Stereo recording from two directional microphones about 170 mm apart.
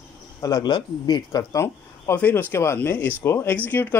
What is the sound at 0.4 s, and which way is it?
Speech, 20° left (ahead or behind).